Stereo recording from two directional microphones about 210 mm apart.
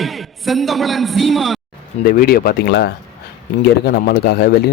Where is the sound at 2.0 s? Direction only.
45° left (ahead or behind).